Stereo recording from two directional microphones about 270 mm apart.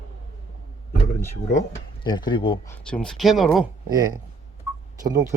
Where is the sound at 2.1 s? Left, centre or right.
Centre.